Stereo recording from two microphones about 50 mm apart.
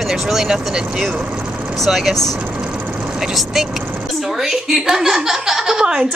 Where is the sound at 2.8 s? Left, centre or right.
Right.